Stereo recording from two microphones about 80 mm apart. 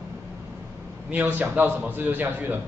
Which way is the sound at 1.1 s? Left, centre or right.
Centre.